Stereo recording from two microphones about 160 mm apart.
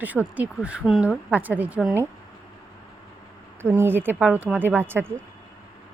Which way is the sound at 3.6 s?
15° right (ahead or behind).